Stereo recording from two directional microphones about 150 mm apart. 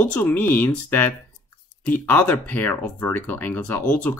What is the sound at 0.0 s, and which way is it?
Speech, 10° left (ahead or behind).